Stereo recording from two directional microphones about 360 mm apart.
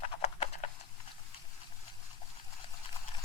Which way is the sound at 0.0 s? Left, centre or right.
Centre.